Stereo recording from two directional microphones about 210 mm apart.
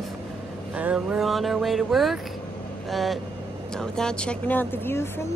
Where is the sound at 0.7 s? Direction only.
5° right (ahead or behind).